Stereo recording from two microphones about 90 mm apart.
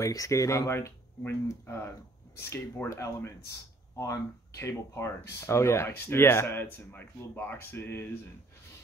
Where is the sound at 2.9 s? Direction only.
35° left (ahead or behind).